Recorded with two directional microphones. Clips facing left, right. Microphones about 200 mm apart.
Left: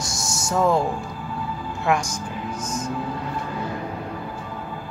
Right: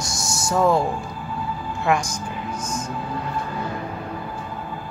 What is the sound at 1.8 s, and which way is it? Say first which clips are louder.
Speech: right 1 dB; centre (ahead or behind).